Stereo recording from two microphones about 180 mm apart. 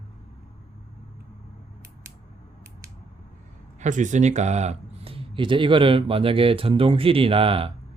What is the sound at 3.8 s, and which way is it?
Speech, 45° right (ahead or behind).